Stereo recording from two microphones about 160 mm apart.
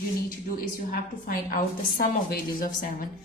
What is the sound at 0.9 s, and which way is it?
A woman's voice, 65° left (ahead or behind).